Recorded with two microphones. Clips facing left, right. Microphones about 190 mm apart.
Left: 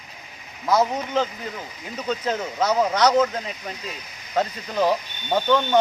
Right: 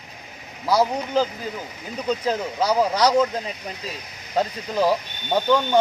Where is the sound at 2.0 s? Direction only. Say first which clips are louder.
Right 2 dB; 10° right (ahead or behind).